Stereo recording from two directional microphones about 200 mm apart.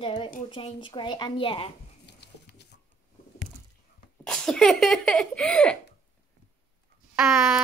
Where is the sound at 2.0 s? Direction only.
55° left (ahead or behind).